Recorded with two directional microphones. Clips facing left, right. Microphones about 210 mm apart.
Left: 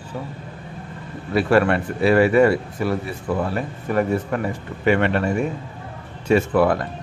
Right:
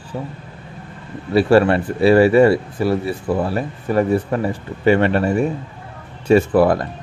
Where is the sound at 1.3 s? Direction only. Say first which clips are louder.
Right 4 dB; 30° right (ahead or behind).